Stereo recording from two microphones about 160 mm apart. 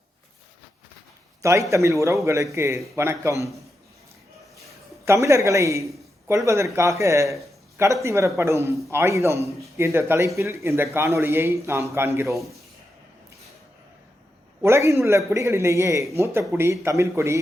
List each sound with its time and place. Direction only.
1.4 s a man's voice: 20° right (ahead or behind)
5.0 s a man's voice: 20° right (ahead or behind)
14.6 s a man's voice: 15° right (ahead or behind)